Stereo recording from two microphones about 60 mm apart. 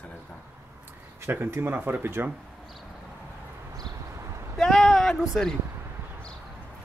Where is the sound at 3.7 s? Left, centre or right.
Right.